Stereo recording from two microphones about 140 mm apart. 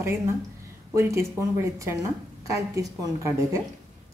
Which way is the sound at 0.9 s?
20° right (ahead or behind).